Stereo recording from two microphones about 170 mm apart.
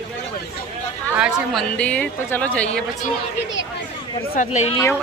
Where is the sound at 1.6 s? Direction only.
5° left (ahead or behind).